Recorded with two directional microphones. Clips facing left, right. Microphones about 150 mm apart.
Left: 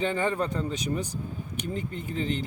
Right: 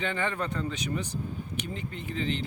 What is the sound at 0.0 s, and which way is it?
Speech, 35° left (ahead or behind).